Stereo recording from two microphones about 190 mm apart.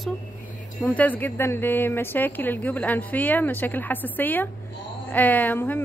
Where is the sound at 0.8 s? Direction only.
10° left (ahead or behind).